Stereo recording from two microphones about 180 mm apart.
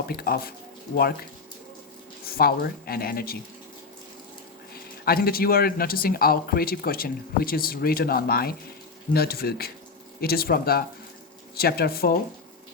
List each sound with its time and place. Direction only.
0.1 s speech: 55° left (ahead or behind)
2.2 s speech: 55° left (ahead or behind)
4.7 s speech: 60° left (ahead or behind)